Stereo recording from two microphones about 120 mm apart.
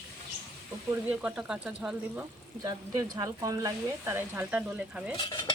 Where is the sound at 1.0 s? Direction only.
10° right (ahead or behind).